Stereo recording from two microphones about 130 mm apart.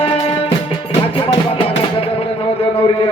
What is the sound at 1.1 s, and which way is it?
Music, 45° left (ahead or behind).